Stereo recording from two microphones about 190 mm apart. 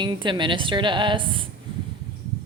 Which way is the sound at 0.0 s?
25° right (ahead or behind).